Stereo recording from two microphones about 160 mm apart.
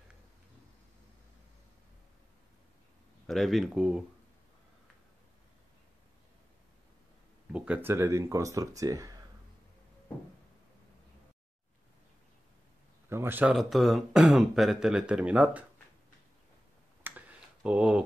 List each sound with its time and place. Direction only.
3.3 s speech: centre (ahead or behind)
7.5 s speech: 10° right (ahead or behind)
13.1 s speech: 15° right (ahead or behind)
17.0 s a sound: 10° right (ahead or behind)